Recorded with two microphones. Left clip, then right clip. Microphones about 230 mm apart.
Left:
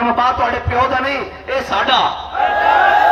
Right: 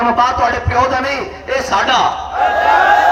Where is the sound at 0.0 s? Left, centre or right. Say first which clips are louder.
Right 2 dB; left.